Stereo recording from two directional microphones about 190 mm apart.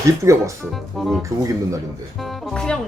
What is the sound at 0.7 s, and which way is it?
Speech, centre (ahead or behind).